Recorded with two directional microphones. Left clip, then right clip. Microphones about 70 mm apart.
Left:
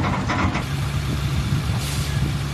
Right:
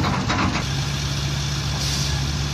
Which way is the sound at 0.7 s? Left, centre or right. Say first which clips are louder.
Right 2 dB; right.